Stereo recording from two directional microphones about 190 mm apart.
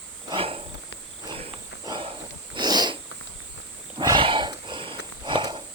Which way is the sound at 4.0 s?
25° right (ahead or behind).